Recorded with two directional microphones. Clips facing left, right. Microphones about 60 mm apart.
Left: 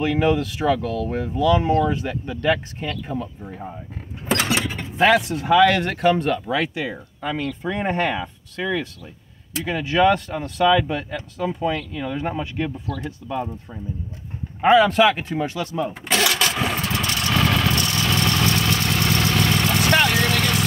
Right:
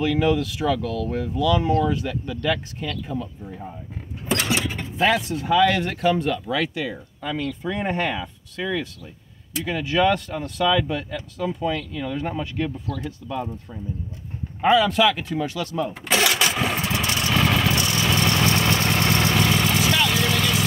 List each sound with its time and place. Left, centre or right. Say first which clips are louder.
0.0 s speech: left 1 dB; left
3.4 s speech: left 2 dB; left
4.9 s speech: left 4 dB; left
6.5 s speech: left 1 dB; left
7.2 s speech: left 2 dB; left
9.7 s speech: left 2 dB; left
14.8 s speech: left 3 dB; left
15.7 s speech: left 1 dB; centre
16.1 s vehicle: even; centre; by 19.3 s right
19.3 s vehicle: even; centre
19.9 s vehicle: left 3 dB; left